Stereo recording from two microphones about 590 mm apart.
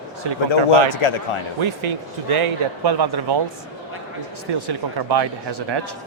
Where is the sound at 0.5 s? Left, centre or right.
Left.